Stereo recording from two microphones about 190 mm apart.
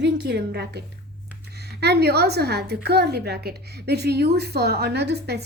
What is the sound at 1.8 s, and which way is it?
A woman's voice, 60° right (ahead or behind).